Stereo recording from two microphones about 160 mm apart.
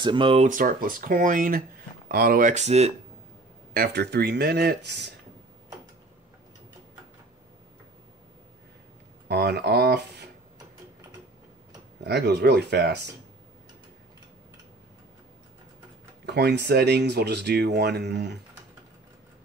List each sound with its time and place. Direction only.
0.0 s speech: 30° right (ahead or behind)
0.5 s speech: 60° right (ahead or behind)
2.0 s speech: 70° right (ahead or behind); by 2.9 s 45° right (ahead or behind)
3.7 s speech: 80° right
9.3 s speech: 90° right
12.0 s speech: 90° right
16.3 s speech: 90° right